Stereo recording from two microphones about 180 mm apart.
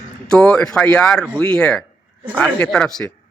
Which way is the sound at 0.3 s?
5° left (ahead or behind).